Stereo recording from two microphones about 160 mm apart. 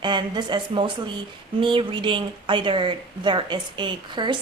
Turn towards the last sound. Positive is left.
turn(degrees=-30)  # may be behind; listen again after turning